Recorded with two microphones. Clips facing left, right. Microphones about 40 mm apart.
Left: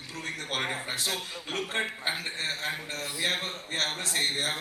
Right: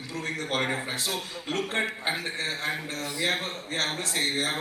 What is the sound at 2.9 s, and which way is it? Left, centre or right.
A man's voice, right.